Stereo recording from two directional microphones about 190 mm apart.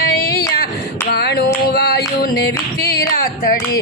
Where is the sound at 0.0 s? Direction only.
55° left (ahead or behind).